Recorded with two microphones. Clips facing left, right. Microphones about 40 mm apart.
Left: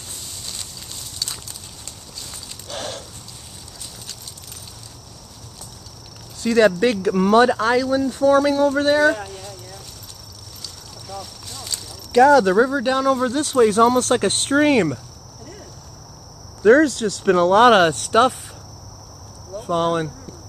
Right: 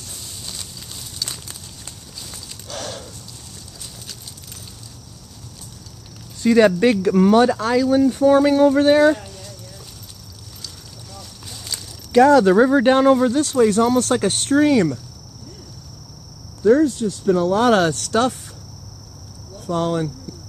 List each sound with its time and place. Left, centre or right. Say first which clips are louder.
0.5 s a sound: even; centre
2.7 s a sound: left 1 dB; centre
6.4 s speech: right 2 dB; centre
7.4 s speech: left 1 dB; centre
7.9 s speech: right 5 dB; centre
11.4 s a sound: even; centre
12.7 s speech: right 5 dB; right
13.2 s speech: right 1 dB; centre; by 14.7 s left
16.6 s speech: left 1 dB; left
17.7 s speech: left 3 dB; left
19.6 s speech: left 1 dB; left